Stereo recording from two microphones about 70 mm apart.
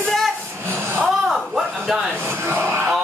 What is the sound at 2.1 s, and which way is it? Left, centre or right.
Speech, right.